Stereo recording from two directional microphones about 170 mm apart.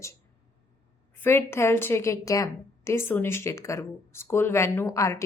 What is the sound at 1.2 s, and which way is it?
A woman's voice, 15° left (ahead or behind).